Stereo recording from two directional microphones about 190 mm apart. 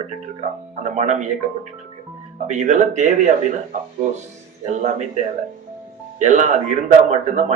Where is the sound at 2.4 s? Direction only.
40° right (ahead or behind).